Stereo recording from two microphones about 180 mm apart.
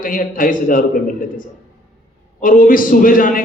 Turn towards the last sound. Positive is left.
turn(degrees=50)  # may be behind; listen again after turning